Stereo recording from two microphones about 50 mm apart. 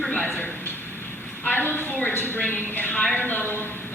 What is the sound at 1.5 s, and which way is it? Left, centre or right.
A woman's voice, left.